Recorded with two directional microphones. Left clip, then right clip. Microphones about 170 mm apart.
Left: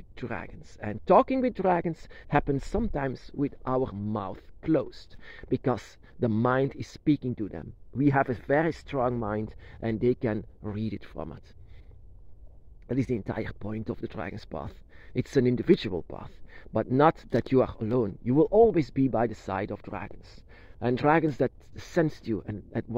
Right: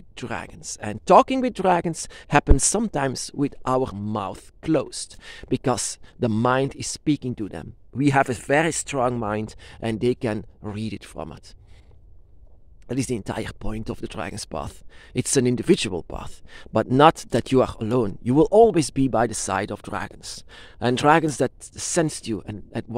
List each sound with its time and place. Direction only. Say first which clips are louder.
0.1 s speech: right 5 dB; 30° right (ahead or behind)
12.8 s speech: right 3 dB; 25° right (ahead or behind)